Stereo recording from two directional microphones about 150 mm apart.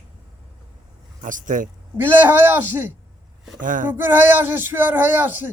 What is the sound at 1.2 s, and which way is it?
Speech, 60° right (ahead or behind).